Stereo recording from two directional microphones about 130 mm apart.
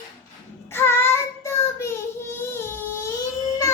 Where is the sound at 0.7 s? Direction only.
20° left (ahead or behind).